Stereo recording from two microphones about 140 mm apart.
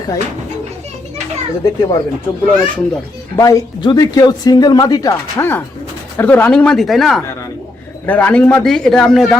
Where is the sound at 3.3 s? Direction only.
25° left (ahead or behind).